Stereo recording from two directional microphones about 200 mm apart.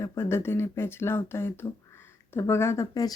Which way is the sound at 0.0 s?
15° left (ahead or behind).